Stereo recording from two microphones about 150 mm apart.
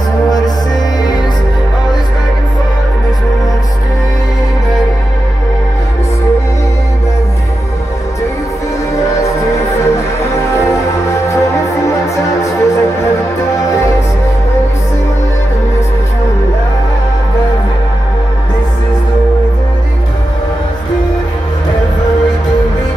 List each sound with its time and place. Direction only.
9.2 s music: 20° left (ahead or behind)